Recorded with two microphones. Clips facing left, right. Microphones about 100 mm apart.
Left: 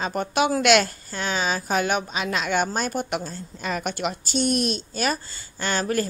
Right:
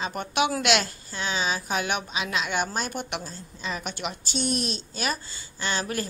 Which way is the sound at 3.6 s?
55° left (ahead or behind).